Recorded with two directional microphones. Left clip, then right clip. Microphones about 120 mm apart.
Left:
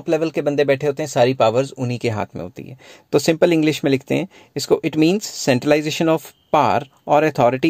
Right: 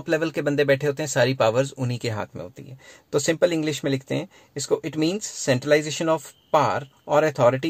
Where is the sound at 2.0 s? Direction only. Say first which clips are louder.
Left 8 dB; 40° left (ahead or behind).